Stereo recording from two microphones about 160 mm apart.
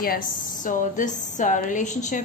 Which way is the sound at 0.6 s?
55° left (ahead or behind).